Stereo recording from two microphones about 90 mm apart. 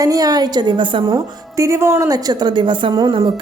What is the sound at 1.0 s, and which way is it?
A woman's voice, 40° right (ahead or behind).